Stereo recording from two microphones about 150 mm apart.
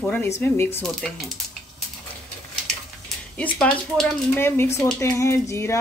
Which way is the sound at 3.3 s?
10° left (ahead or behind).